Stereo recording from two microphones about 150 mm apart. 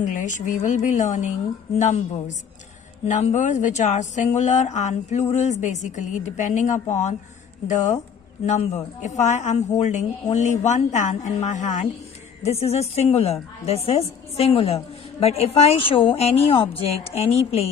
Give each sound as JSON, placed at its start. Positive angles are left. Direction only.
{"t": 0.0, "sound": "a woman's voice", "side_deg": 55}